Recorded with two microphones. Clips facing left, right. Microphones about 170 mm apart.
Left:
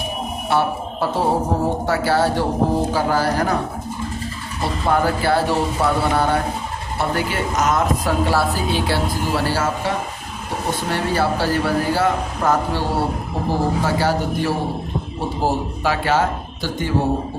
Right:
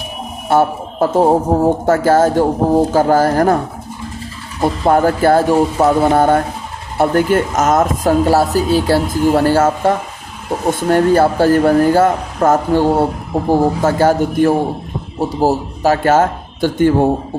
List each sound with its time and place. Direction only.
0.5 s a man's voice: 50° right (ahead or behind)
4.6 s a woman's voice: 45° right (ahead or behind)